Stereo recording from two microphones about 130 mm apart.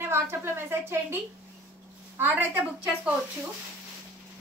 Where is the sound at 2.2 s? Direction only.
15° right (ahead or behind).